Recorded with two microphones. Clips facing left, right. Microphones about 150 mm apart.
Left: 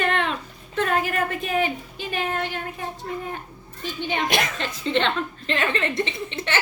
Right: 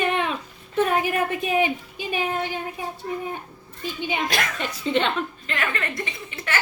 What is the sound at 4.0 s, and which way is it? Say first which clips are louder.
A woman's voice: left 2 dB; 10° right (ahead or behind).